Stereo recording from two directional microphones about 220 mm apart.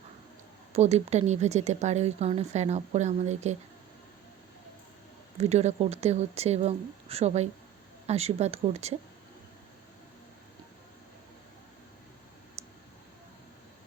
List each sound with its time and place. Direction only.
0.7 s speech: 30° right (ahead or behind)
5.4 s a woman's voice: 30° right (ahead or behind)